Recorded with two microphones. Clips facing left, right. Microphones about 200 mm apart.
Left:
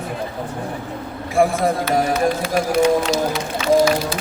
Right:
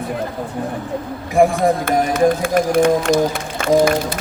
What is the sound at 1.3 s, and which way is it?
Speech, 15° right (ahead or behind).